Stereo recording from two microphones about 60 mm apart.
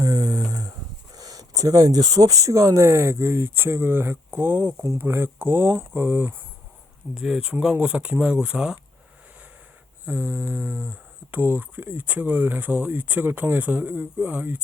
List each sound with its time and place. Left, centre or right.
0.0 s a sound: right
1.1 s speech: right
7.1 s speech: centre
10.1 s speech: right